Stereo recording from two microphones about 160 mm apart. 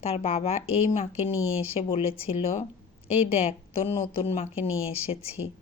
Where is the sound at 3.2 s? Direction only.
40° left (ahead or behind).